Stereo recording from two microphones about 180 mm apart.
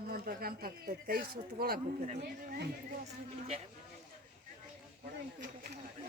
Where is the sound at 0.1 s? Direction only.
55° right (ahead or behind).